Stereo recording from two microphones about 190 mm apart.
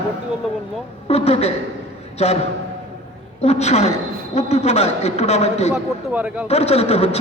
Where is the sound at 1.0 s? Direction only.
30° left (ahead or behind).